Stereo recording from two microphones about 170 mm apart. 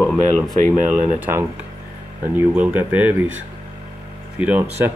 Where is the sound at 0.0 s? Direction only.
Centre (ahead or behind).